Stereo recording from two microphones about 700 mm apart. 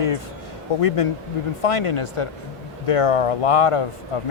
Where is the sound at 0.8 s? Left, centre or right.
Left.